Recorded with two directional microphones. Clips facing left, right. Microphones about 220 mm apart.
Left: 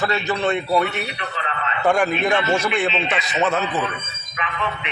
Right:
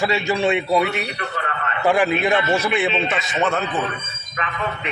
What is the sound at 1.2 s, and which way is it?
Speech, 50° right (ahead or behind).